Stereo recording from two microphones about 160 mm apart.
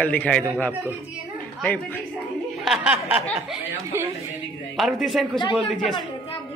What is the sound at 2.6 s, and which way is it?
Speech, 5° right (ahead or behind).